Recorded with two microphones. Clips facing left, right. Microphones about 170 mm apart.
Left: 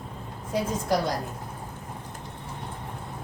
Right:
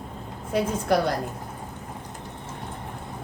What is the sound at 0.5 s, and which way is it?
Speech, 65° right (ahead or behind).